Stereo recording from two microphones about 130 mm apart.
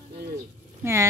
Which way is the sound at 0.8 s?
20° right (ahead or behind).